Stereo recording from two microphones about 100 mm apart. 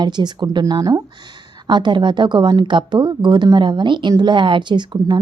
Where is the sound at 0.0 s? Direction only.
45° right (ahead or behind).